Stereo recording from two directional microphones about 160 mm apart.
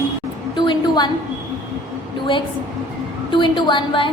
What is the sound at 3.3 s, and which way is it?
Speech, 30° left (ahead or behind).